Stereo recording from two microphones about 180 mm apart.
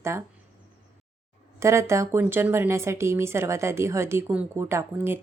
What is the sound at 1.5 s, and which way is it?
A woman's voice, 15° right (ahead or behind).